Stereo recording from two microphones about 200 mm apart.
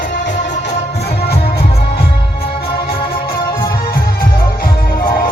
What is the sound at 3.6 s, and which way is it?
Music, 20° left (ahead or behind).